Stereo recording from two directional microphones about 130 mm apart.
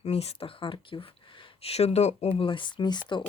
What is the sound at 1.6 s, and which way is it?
Speech, 55° left (ahead or behind).